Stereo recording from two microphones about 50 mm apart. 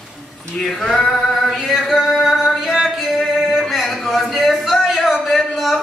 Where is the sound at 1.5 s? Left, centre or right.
Centre.